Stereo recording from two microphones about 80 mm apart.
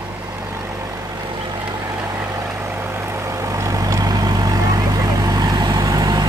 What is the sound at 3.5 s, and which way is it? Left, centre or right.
Vehicle, right.